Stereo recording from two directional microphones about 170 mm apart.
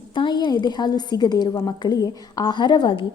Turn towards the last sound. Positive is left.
turn(degrees=25)  # may be behind; listen again after turning